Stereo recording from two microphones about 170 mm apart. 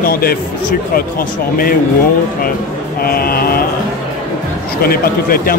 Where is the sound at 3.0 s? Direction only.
60° left (ahead or behind).